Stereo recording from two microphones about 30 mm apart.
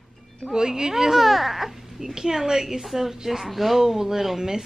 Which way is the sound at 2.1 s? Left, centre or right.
Centre.